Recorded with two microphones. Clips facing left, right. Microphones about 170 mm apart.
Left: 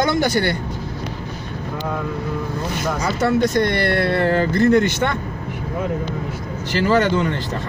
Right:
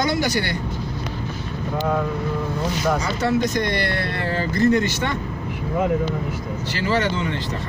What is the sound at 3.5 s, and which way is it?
Speech, 55° left (ahead or behind).